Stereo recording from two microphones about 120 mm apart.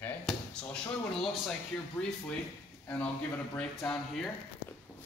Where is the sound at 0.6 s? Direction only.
10° left (ahead or behind).